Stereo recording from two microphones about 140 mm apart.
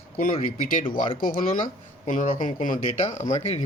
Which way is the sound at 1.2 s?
85° left.